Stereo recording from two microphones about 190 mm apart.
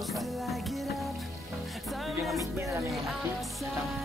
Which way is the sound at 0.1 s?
Centre (ahead or behind).